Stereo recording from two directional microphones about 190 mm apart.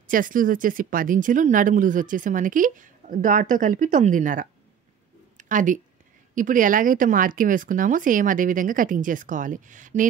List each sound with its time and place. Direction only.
0.1 s speech: 45° right (ahead or behind)